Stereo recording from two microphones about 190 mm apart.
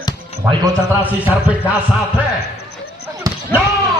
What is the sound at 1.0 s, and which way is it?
Speech, 10° right (ahead or behind).